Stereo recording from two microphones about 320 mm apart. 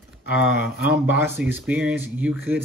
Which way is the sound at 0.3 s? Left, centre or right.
Centre.